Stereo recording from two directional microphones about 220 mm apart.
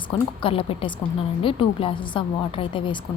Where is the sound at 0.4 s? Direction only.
25° left (ahead or behind).